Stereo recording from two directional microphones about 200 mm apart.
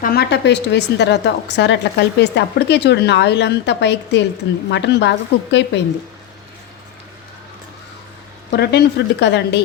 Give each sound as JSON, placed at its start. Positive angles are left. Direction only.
{"t": 0.0, "sound": "a woman's voice", "side_deg": 50}
{"t": 8.5, "sound": "a woman's voice", "side_deg": 55}